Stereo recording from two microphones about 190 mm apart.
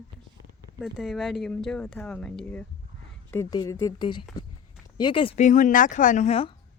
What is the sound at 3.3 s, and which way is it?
Speech, 20° left (ahead or behind).